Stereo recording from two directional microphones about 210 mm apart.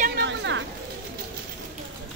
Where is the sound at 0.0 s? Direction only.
50° right (ahead or behind).